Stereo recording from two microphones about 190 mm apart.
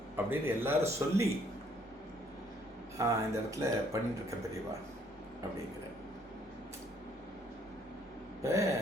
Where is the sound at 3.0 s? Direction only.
15° right (ahead or behind).